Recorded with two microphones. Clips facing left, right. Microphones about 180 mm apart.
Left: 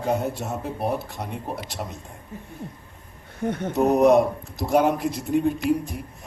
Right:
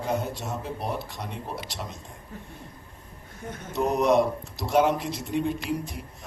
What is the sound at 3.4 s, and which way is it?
A man's voice, 65° left (ahead or behind).